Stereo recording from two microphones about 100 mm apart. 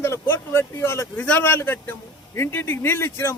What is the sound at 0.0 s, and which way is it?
Speech, 25° left (ahead or behind).